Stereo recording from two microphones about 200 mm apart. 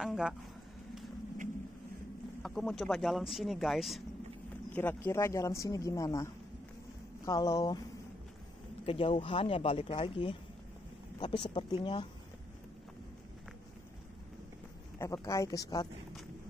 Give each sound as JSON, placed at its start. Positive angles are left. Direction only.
{"t": 0.0, "sound": "speech", "side_deg": 0}
{"t": 2.4, "sound": "speech", "side_deg": 0}
{"t": 4.7, "sound": "speech", "side_deg": 10}
{"t": 8.8, "sound": "speech", "side_deg": 25}
{"t": 15.0, "sound": "speech", "side_deg": 15}